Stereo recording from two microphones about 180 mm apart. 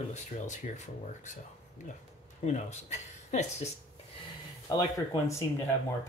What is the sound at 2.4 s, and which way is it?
Speech, 40° left (ahead or behind).